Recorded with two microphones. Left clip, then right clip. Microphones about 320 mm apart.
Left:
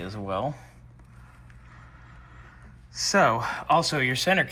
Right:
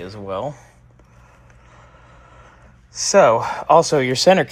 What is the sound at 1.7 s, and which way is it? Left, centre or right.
Speech, centre.